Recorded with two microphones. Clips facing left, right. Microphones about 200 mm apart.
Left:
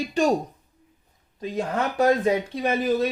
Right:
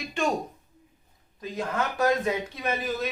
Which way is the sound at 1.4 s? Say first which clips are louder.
Left 4 dB; 30° left (ahead or behind).